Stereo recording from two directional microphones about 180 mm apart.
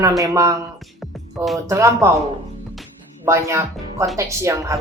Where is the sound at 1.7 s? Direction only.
15° right (ahead or behind).